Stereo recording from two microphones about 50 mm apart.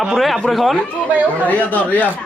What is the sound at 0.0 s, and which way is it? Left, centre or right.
Speech, centre.